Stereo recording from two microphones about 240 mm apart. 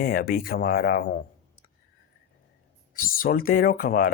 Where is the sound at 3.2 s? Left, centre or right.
Left.